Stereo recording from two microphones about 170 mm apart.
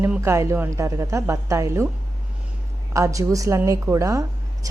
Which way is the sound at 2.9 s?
20° right (ahead or behind).